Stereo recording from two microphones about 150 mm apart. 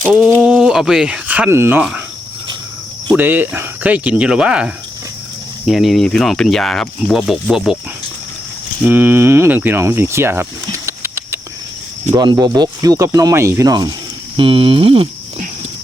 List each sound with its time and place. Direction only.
0.0 s speech: 10° right (ahead or behind)
3.2 s speech: 15° right (ahead or behind)
8.9 s speech: 15° right (ahead or behind)
12.1 s speech: 30° right (ahead or behind)
14.3 s speech: 35° right (ahead or behind)